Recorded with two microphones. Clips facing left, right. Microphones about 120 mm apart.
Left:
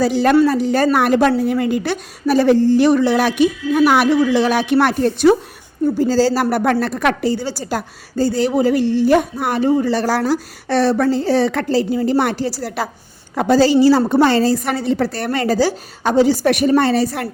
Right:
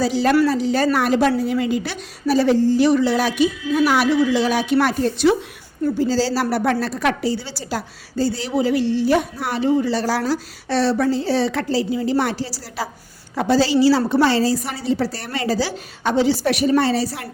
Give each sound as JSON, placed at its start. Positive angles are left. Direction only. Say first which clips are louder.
{"t": 0.0, "sound": "a woman's voice", "louder": "left 3 dB", "side_deg": 55}